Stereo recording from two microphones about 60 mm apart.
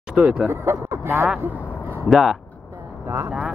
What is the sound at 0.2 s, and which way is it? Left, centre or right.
Speech, centre.